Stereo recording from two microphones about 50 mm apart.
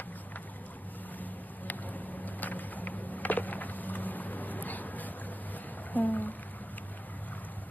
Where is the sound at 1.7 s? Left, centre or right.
Left.